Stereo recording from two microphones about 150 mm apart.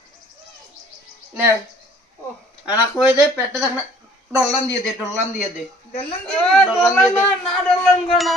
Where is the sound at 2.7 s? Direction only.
10° right (ahead or behind).